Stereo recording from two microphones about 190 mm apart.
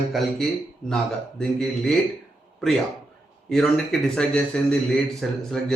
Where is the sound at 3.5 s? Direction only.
5° left (ahead or behind).